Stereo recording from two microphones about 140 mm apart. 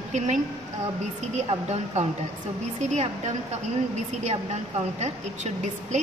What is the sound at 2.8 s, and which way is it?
Speech, 60° right (ahead or behind).